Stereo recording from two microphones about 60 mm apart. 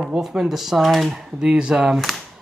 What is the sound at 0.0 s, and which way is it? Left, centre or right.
A man's voice, centre.